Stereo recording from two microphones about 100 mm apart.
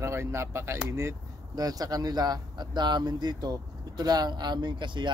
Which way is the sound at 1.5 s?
40° right (ahead or behind).